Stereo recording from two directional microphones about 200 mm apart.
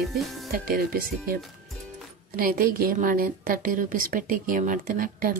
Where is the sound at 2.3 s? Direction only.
45° right (ahead or behind).